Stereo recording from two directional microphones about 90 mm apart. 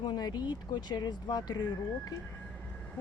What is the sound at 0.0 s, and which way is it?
Speech, 50° left (ahead or behind).